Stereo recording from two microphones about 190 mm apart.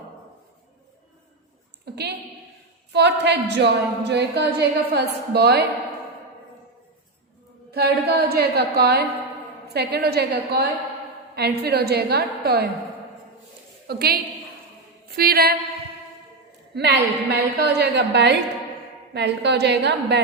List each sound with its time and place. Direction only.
1.8 s a sound: 60° right (ahead or behind)
2.9 s a woman's voice: 65° right (ahead or behind)
7.7 s a woman's voice: 55° right (ahead or behind)
13.8 s a woman's voice: 55° right (ahead or behind)
16.7 s a woman's voice: 60° right (ahead or behind)